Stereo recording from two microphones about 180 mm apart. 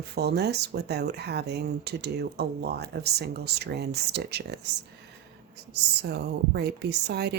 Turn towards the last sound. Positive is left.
turn(degrees=-65)  # may be behind; listen again after turning